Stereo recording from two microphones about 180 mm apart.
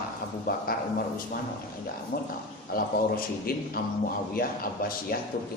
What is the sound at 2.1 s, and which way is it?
A man's voice, 50° left (ahead or behind).